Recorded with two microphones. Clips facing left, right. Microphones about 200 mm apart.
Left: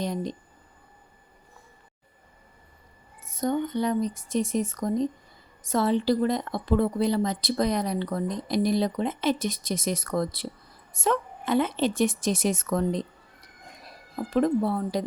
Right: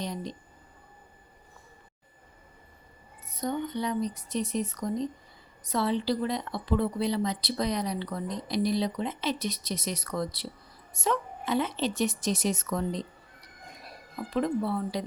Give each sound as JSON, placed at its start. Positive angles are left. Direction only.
{"t": 0.0, "sound": "a woman's voice", "side_deg": 50}
{"t": 3.2, "sound": "a woman's voice", "side_deg": 45}
{"t": 14.2, "sound": "a woman's voice", "side_deg": 45}